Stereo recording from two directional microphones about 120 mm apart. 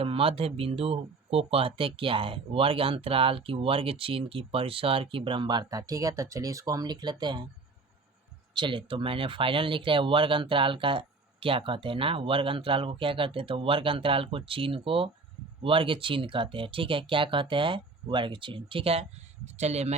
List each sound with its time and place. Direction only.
0.0 s speech: 50° right (ahead or behind)
8.5 s speech: 45° right (ahead or behind)
19.5 s speech: 65° right (ahead or behind)